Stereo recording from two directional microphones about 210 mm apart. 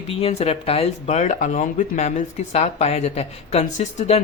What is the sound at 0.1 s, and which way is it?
Speech, 30° left (ahead or behind).